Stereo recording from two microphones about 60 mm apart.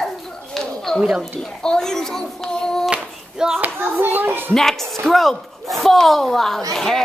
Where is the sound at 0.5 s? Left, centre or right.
Centre.